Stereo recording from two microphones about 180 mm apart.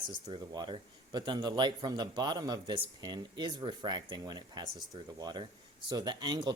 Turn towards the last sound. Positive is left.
turn(degrees=-25)  # may be behind; listen again after turning